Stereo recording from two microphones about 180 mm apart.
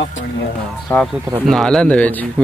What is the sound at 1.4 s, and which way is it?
Speech, centre (ahead or behind).